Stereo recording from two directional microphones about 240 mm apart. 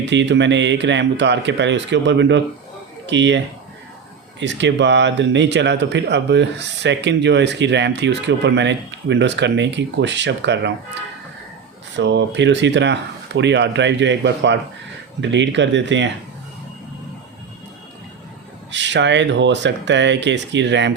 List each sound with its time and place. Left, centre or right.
0.0 s speech: right
11.9 s speech: right
18.7 s speech: right